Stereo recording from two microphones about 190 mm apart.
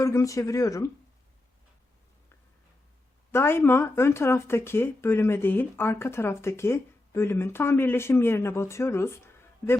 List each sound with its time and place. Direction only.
0.0 s speech: 15° left (ahead or behind)
3.3 s speech: 15° left (ahead or behind)